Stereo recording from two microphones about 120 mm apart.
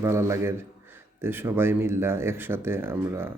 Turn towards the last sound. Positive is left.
turn(degrees=-20)  # may be behind; listen again after turning